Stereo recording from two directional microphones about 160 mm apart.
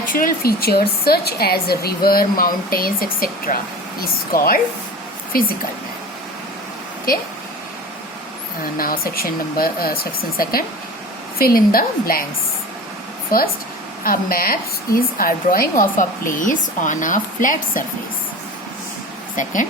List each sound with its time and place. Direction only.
0.1 s a woman's voice: 65° left (ahead or behind)
8.8 s a woman's voice: 65° left (ahead or behind)
14.0 s a woman's voice: 65° left (ahead or behind)